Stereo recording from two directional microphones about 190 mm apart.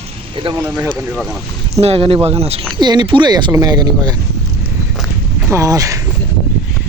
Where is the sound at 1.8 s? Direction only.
30° right (ahead or behind).